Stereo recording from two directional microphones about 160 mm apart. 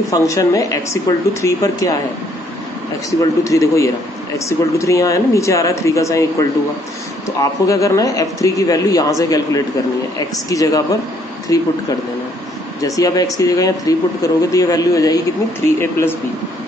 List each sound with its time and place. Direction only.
0.1 s speech: 20° left (ahead or behind)
3.1 s speech: 20° left (ahead or behind)
7.3 s speech: 20° left (ahead or behind)
12.8 s speech: 20° left (ahead or behind)